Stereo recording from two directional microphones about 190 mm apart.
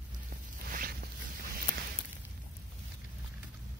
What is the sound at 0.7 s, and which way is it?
Zipper, 50° right (ahead or behind).